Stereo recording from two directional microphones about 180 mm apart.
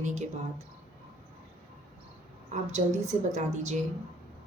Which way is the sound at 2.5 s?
40° right (ahead or behind).